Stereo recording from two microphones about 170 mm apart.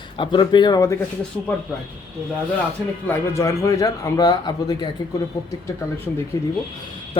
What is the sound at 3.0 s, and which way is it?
Speech, 15° left (ahead or behind).